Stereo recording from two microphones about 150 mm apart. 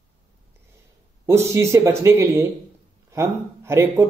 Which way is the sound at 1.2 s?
15° right (ahead or behind).